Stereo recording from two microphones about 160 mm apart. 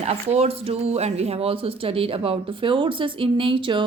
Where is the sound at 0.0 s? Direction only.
45° right (ahead or behind).